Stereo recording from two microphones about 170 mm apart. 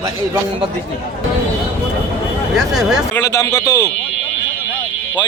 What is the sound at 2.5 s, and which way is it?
Speech, centre (ahead or behind).